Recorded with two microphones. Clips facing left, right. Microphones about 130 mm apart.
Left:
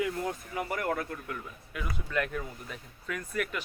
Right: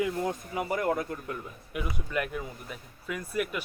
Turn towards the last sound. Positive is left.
turn(degrees=-10)  # may be behind; listen again after turning